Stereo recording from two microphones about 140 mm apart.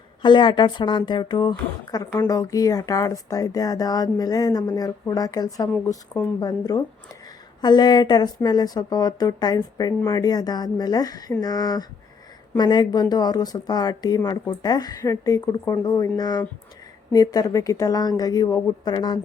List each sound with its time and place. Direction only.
0.2 s speech: 35° left (ahead or behind)